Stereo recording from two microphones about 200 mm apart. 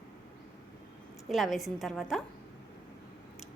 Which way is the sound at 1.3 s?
Centre (ahead or behind).